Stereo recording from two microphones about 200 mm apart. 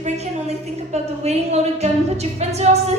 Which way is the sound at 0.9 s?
35° right (ahead or behind).